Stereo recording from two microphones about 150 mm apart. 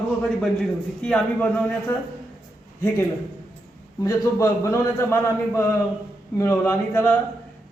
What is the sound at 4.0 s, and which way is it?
A man's voice, 20° left (ahead or behind).